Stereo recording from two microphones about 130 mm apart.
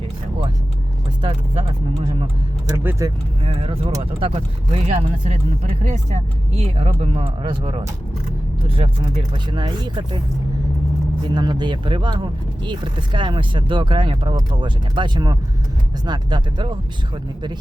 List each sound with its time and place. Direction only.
1.2 s speech: 45° right (ahead or behind)
2.6 s speech: 20° right (ahead or behind)
3.4 s speech: 45° right (ahead or behind)
11.3 s speech: 35° right (ahead or behind)